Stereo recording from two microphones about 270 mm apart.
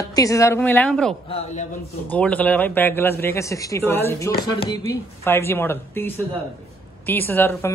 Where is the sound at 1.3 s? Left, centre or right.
Left.